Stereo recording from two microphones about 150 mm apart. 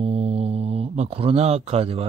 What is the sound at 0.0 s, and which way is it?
Speech, 45° right (ahead or behind).